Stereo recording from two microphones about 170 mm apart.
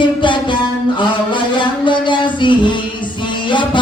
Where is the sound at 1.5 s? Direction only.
30° left (ahead or behind).